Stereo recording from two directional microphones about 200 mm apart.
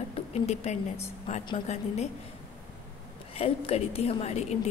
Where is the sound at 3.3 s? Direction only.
30° left (ahead or behind).